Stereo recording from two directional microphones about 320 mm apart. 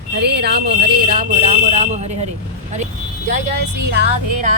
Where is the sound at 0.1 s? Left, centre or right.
Right.